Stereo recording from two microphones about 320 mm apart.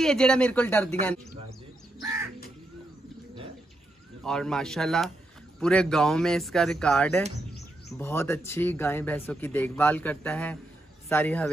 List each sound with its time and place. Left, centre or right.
0.0 s speech: centre
2.0 s crow: centre
4.2 s speech: centre